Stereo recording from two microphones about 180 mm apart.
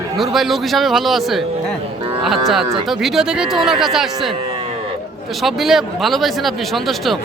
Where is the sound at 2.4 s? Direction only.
Centre (ahead or behind).